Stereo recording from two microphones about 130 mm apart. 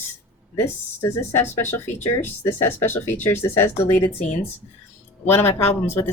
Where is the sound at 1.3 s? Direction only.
20° left (ahead or behind).